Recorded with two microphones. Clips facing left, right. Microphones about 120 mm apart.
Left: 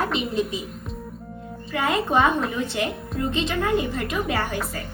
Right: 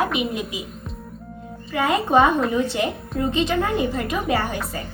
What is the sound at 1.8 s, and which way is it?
Speech, 20° right (ahead or behind).